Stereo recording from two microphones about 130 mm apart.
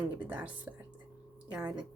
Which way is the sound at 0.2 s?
10° right (ahead or behind).